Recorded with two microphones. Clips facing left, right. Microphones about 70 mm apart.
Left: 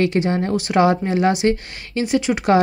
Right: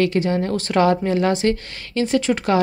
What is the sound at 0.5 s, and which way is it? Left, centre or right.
Speech, centre.